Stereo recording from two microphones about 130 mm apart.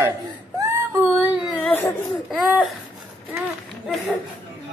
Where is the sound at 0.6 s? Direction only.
20° right (ahead or behind).